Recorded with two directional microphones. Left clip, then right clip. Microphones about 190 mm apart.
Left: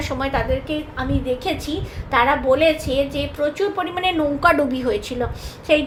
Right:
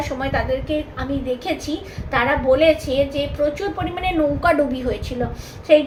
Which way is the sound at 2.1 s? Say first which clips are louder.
Left 1 dB; 40° left (ahead or behind).